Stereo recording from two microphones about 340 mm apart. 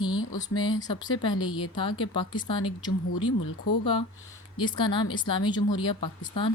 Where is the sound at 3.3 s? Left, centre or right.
Left.